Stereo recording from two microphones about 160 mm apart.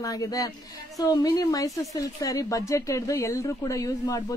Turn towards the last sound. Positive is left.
turn(degrees=20)  # may be behind; listen again after turning